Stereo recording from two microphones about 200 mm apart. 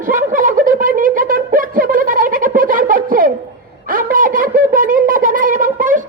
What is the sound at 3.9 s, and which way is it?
Shofar, 45° right (ahead or behind).